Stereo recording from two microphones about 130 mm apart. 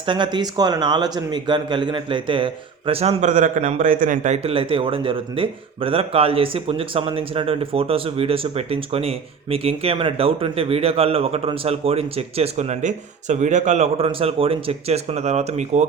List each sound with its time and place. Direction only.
0.0 s speech: 40° right (ahead or behind); by 4.5 s 65° right (ahead or behind)
4.5 s speech: 45° right (ahead or behind); by 15.9 s 65° right (ahead or behind)